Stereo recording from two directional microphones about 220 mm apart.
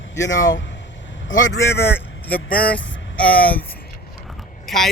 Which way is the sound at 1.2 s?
60° left (ahead or behind).